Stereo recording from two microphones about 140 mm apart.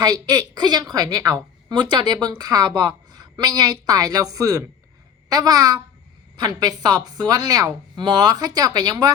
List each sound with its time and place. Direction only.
0.0 s speech: 25° right (ahead or behind)